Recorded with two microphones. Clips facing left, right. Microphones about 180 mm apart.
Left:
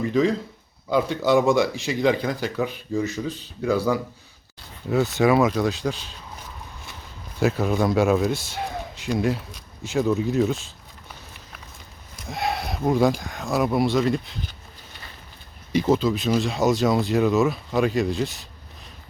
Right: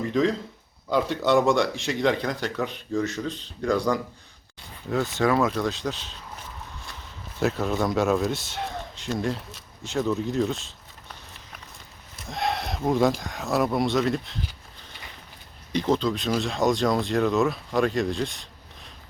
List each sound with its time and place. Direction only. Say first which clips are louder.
0.0 s speech: left 2 dB; centre (ahead or behind)
7.3 s speech: left 3 dB; 5° left (ahead or behind)
12.1 s speech: left 1 dB; centre (ahead or behind)
15.7 s speech: left 3 dB; 10° left (ahead or behind)